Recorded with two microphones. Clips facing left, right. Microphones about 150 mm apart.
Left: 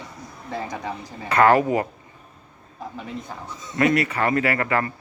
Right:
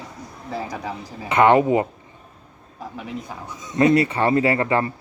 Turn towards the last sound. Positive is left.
turn(degrees=-25)  # may be behind; listen again after turning